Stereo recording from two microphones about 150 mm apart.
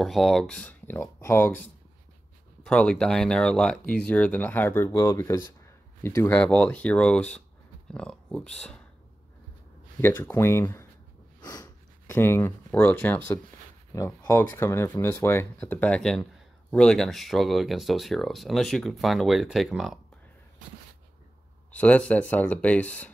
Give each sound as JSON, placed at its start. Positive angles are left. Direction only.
{"t": 0.0, "sound": "speech", "side_deg": 0}
{"t": 9.9, "sound": "speech", "side_deg": 15}
{"t": 11.4, "sound": "sniff", "side_deg": 25}
{"t": 12.1, "sound": "speech", "side_deg": 15}
{"t": 21.7, "sound": "speech", "side_deg": 10}